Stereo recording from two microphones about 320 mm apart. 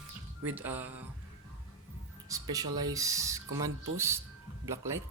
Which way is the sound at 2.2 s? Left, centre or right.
Centre.